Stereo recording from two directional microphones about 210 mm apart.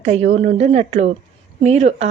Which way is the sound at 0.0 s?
30° right (ahead or behind).